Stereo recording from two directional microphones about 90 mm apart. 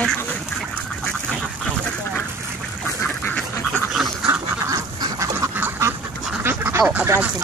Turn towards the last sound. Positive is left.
turn(degrees=-20)  # may be behind; listen again after turning